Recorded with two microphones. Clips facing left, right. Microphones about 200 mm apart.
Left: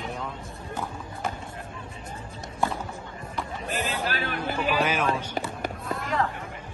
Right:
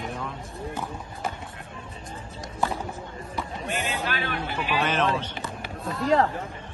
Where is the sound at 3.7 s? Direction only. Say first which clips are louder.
Even; 35° left (ahead or behind).